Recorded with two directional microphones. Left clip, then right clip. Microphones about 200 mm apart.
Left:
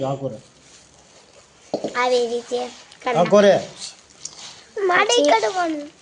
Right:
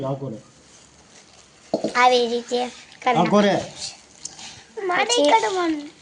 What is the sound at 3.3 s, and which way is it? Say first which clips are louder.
Speech: left 9 dB; 55° left (ahead or behind).